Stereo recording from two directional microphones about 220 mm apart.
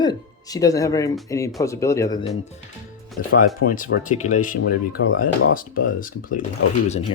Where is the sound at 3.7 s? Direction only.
40° left (ahead or behind).